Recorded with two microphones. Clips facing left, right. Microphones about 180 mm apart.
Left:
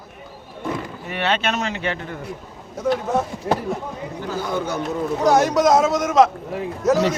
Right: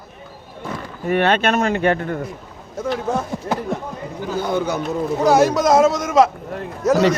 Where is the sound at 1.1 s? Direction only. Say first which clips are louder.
Right 6 dB; 50° right (ahead or behind).